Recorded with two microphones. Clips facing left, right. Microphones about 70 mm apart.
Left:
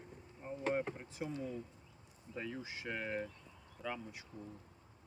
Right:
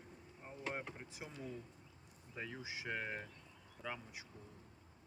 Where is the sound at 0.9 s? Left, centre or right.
Centre.